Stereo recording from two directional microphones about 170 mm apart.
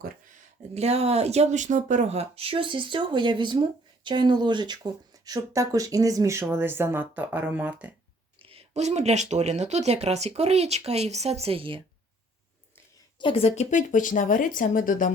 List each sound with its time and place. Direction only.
0.7 s speech: 40° right (ahead or behind); by 7.9 s 10° right (ahead or behind)
8.4 s speech: 35° right (ahead or behind)
13.1 s speech: 30° left (ahead or behind); by 15.1 s 55° left (ahead or behind)